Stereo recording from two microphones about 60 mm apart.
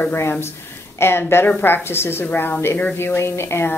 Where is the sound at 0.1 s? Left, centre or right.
Left.